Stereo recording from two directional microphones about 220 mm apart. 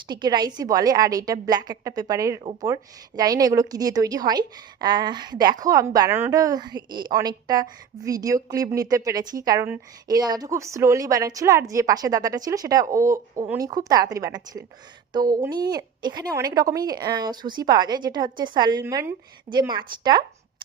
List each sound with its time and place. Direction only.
0.1 s a woman's voice: 20° right (ahead or behind)